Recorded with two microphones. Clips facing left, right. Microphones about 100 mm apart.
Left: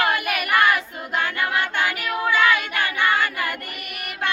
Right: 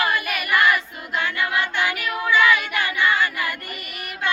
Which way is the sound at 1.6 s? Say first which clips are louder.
Even; 45° left (ahead or behind).